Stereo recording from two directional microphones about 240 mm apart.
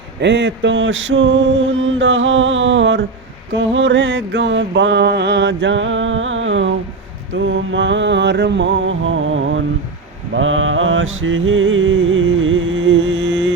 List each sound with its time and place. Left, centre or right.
0.2 s mantra: right